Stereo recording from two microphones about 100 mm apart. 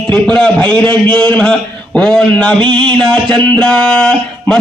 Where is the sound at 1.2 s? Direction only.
10° left (ahead or behind).